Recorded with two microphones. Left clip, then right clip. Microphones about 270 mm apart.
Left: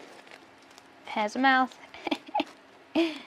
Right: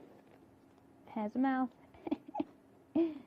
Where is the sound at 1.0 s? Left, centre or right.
Centre.